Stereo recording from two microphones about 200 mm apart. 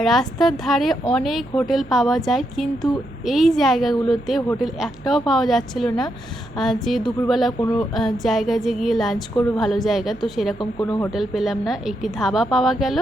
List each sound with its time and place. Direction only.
0.0 s a woman's voice: centre (ahead or behind)
10.6 s speech: 20° left (ahead or behind)
11.1 s a woman's voice: centre (ahead or behind)